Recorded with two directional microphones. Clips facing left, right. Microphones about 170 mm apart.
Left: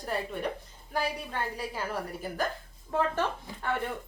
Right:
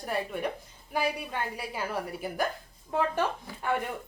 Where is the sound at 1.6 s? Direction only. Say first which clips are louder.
Right 1 dB; 10° right (ahead or behind).